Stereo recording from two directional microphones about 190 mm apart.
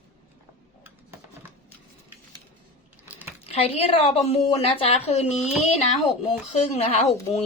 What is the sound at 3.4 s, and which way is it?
A woman's voice, 35° left (ahead or behind).